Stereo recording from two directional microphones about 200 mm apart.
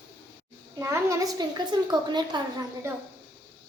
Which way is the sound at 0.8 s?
15° right (ahead or behind).